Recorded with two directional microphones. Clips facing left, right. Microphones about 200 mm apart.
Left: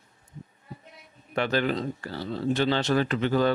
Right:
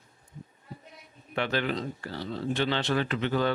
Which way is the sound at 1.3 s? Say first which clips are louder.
Left 3 dB; 40° left (ahead or behind).